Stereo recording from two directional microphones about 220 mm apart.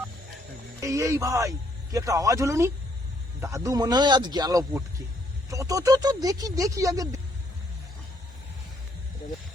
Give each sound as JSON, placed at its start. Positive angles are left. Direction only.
{"t": 0.8, "sound": "a man's voice", "side_deg": -15}